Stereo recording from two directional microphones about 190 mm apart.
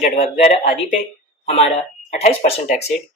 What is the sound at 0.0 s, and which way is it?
Speech, 35° left (ahead or behind).